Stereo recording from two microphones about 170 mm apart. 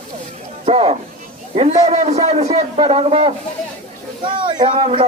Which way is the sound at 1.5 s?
40° right (ahead or behind).